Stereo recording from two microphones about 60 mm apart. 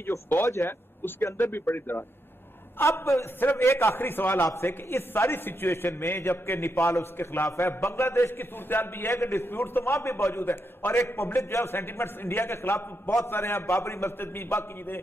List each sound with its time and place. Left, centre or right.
0.0 s a man's voice: left
2.8 s a man's voice: left
3.3 s a man's voice: left